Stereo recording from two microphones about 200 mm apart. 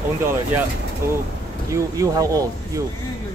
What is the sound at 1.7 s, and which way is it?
Speech, 15° right (ahead or behind).